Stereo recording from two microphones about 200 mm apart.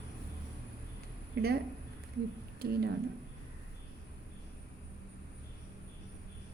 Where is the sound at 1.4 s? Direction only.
55° right (ahead or behind).